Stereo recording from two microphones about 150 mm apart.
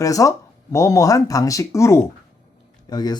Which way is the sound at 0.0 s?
20° left (ahead or behind).